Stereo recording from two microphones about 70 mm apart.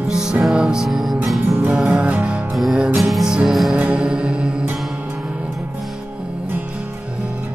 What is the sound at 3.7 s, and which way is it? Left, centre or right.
Music, centre.